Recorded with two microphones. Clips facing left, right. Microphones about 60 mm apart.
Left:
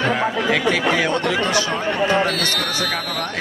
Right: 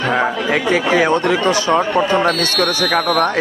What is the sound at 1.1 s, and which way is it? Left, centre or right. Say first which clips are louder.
Speech: right 5 dB; right.